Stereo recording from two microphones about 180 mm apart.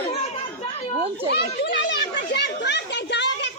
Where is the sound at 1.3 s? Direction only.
75° left (ahead or behind).